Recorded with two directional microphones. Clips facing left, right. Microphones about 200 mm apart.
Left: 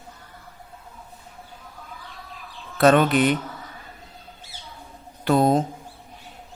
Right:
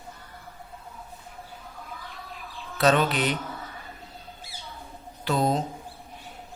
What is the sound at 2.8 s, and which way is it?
Speech, 55° left (ahead or behind).